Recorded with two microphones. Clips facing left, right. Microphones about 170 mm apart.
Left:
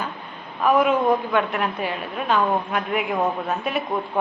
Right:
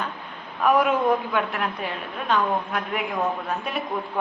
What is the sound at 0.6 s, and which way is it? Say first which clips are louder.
A woman's voice: left 2 dB; centre (ahead or behind).